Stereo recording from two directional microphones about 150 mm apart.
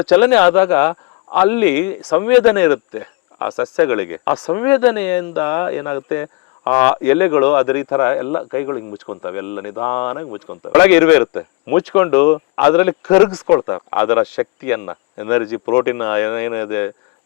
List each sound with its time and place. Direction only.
0.0 s speech: 10° left (ahead or behind)
4.4 s speech: 30° left (ahead or behind)
4.6 s speech: 10° left (ahead or behind)
13.6 s speech: 25° left (ahead or behind)
13.9 s speech: 15° left (ahead or behind)